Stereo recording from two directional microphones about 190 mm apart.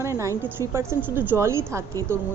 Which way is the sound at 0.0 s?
15° right (ahead or behind).